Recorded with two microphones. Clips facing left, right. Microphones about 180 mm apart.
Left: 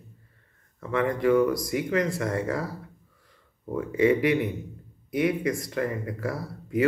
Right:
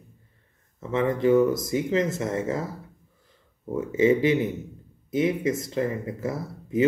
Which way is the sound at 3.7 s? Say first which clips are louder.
Right 1 dB; 25° right (ahead or behind).